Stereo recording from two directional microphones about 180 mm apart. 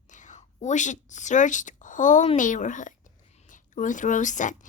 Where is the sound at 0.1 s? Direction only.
45° left (ahead or behind).